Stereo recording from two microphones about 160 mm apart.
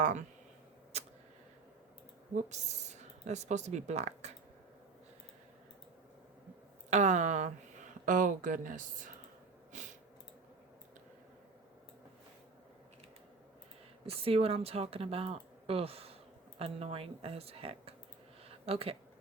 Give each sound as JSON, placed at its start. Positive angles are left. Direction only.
{"t": 0.0, "sound": "speech", "side_deg": -50}
{"t": 0.9, "sound": "a sound", "side_deg": -40}
{"t": 2.3, "sound": "speech", "side_deg": -45}
{"t": 6.9, "sound": "speech", "side_deg": -45}
{"t": 14.1, "sound": "speech", "side_deg": -40}